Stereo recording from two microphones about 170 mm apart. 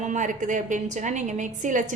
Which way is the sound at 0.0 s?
45° right (ahead or behind).